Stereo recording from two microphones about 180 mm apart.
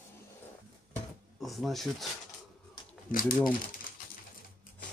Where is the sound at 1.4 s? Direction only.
Centre (ahead or behind).